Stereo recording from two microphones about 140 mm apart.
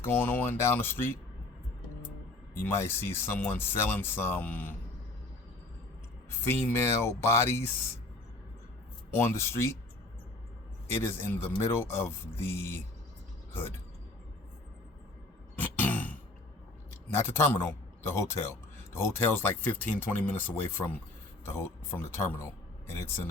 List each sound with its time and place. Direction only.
0.0 s speech: 15° left (ahead or behind)
2.6 s speech: 15° left (ahead or behind)
6.5 s speech: 15° left (ahead or behind)
9.0 s speech: 15° left (ahead or behind)
10.9 s speech: 15° left (ahead or behind)
15.5 s a sound: 10° left (ahead or behind)
16.9 s a man's voice: 15° left (ahead or behind)